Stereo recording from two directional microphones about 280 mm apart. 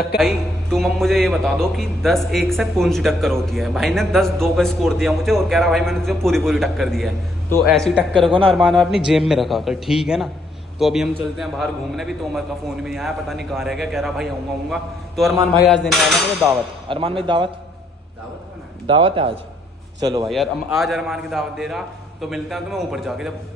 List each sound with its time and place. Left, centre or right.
0.2 s a man's voice: centre
8.3 s a man's voice: centre
8.5 s a man's voice: centre
16.9 s speech: centre
18.9 s speech: centre
20.2 s a man's voice: centre